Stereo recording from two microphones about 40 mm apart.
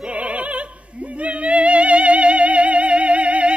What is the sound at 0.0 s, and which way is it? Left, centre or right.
Opera, right.